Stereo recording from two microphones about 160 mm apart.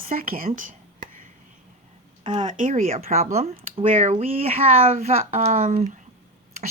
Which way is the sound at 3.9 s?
50° right (ahead or behind).